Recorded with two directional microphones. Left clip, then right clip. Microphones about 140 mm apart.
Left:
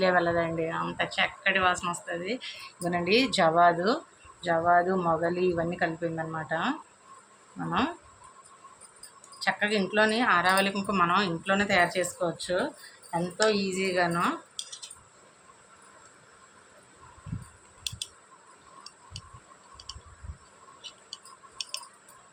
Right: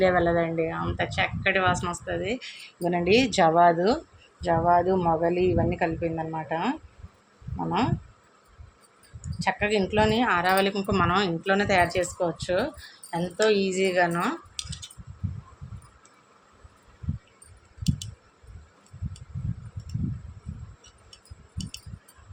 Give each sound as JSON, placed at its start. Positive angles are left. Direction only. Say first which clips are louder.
{"t": 0.0, "sound": "speech", "louder": "right 3 dB", "side_deg": -35}
{"t": 9.4, "sound": "speech", "louder": "right 2 dB", "side_deg": -35}